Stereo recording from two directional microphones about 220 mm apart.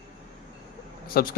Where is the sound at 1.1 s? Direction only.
40° left (ahead or behind).